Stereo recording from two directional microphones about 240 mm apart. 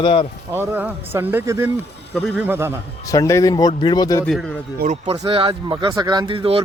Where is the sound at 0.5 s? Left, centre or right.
Centre.